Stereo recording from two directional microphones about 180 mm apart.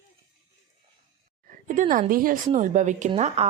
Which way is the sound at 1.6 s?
45° right (ahead or behind).